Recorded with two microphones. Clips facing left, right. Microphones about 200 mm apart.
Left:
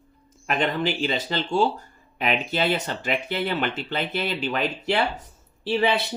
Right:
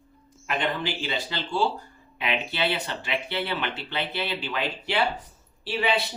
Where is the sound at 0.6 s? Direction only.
45° left (ahead or behind).